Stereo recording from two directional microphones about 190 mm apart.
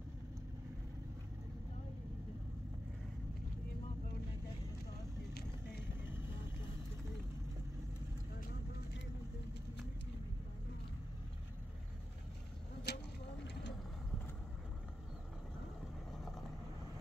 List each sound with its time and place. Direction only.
12.9 s vehicle: 60° left (ahead or behind)